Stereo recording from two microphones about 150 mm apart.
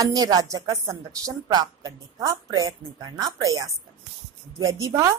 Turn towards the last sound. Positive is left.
turn(degrees=-20)  # may be behind; listen again after turning